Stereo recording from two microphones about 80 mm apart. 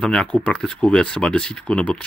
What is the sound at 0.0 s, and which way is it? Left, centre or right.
Speech, centre.